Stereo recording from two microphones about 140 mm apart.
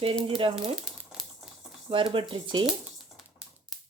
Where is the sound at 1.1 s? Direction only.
5° right (ahead or behind).